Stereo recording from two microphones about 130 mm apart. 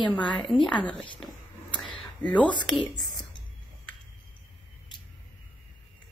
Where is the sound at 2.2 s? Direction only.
10° left (ahead or behind).